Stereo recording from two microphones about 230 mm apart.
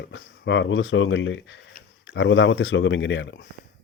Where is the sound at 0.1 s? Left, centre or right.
Left.